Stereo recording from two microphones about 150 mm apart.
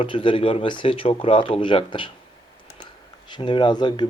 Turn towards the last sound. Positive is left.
turn(degrees=30)  # may be behind; listen again after turning